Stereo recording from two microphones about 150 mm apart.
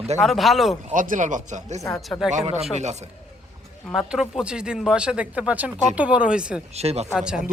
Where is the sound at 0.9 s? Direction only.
60° right (ahead or behind).